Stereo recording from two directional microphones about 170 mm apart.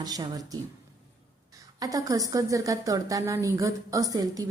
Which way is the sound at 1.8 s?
20° right (ahead or behind).